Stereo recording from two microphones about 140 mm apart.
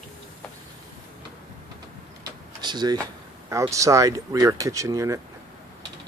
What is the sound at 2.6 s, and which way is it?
Speech, 30° right (ahead or behind).